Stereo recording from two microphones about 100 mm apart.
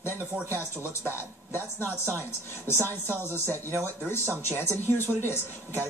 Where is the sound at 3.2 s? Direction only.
20° left (ahead or behind).